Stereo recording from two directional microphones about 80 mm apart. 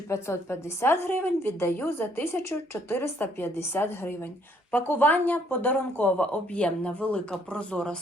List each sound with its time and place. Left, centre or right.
0.1 s a woman's voice: left; by 7.9 s centre